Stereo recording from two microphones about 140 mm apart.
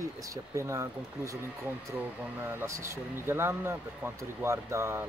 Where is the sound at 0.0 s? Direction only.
20° right (ahead or behind).